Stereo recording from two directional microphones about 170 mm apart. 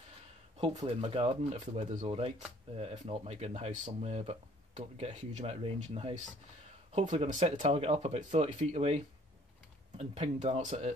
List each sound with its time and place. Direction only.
0.8 s speech: 35° right (ahead or behind)